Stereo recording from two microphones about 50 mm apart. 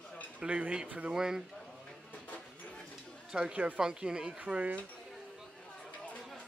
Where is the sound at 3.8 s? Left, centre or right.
Centre.